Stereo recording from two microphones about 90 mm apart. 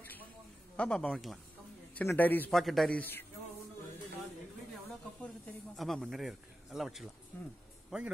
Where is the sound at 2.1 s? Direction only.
20° left (ahead or behind).